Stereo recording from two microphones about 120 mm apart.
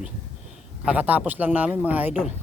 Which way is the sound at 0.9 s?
10° right (ahead or behind).